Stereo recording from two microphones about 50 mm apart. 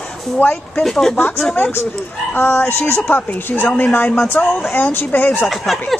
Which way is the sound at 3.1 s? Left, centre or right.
Left.